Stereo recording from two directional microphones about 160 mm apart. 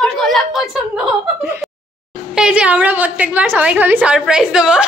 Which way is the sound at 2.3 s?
5° right (ahead or behind).